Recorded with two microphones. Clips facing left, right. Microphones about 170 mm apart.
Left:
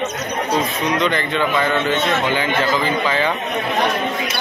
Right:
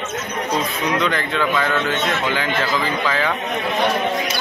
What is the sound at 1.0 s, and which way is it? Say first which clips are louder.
Speech: left 2 dB; centre (ahead or behind).